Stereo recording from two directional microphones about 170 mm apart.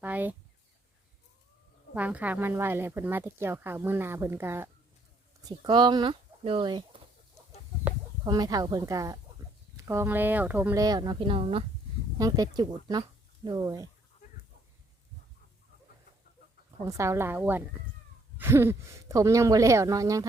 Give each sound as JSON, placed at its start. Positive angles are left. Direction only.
{"t": 0.0, "sound": "speech", "side_deg": -10}
{"t": 2.0, "sound": "speech", "side_deg": -10}
{"t": 5.5, "sound": "speech", "side_deg": -25}
{"t": 8.2, "sound": "speech", "side_deg": -25}
{"t": 10.8, "sound": "a woman's voice", "side_deg": -25}
{"t": 12.1, "sound": "speech", "side_deg": -20}
{"t": 16.8, "sound": "speech", "side_deg": -15}